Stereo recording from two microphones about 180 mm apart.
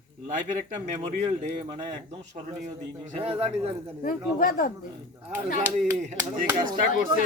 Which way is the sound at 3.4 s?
35° right (ahead or behind).